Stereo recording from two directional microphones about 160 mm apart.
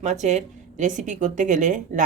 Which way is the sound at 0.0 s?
45° right (ahead or behind).